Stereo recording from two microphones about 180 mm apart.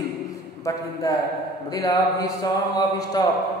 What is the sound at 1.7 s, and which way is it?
Speech, 20° left (ahead or behind).